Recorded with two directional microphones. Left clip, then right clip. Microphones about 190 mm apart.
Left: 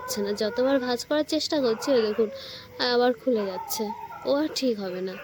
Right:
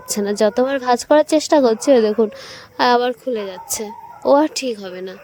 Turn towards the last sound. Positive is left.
turn(degrees=-50)  # may be behind; listen again after turning